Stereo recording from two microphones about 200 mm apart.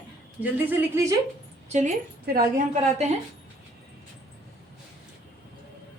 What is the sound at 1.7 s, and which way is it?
A woman's voice, 35° right (ahead or behind).